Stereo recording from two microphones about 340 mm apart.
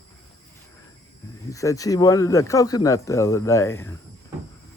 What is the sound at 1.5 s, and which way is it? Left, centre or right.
Speech, centre.